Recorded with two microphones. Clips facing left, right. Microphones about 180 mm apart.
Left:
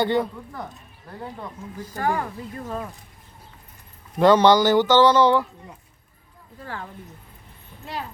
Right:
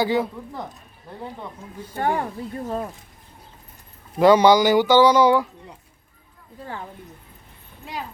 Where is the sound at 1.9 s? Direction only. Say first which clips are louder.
Right 2 dB; 30° right (ahead or behind).